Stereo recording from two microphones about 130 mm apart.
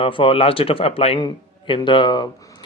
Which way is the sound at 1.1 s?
35° left (ahead or behind).